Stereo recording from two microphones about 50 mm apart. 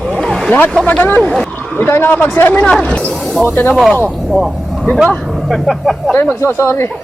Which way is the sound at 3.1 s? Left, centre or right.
Centre.